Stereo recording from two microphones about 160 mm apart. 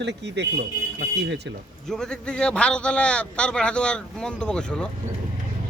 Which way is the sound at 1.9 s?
5° left (ahead or behind).